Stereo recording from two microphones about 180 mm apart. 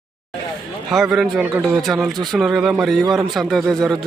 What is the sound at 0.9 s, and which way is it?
Speech, centre (ahead or behind).